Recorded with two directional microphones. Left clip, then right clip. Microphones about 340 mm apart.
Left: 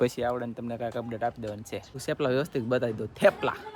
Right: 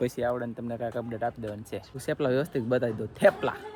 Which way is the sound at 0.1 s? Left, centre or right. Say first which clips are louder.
Even; centre.